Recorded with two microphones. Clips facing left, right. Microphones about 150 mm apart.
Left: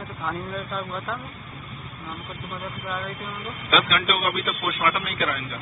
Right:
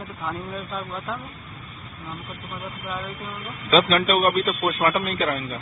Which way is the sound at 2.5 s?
Centre (ahead or behind).